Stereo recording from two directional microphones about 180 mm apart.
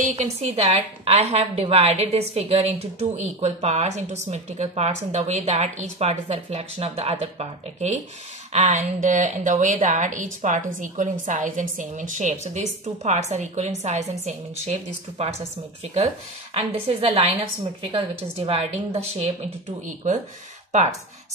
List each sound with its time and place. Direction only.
0.2 s a woman's voice: 35° right (ahead or behind)
15.8 s a woman's voice: 35° right (ahead or behind)